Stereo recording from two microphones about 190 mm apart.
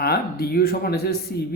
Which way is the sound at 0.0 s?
55° left (ahead or behind).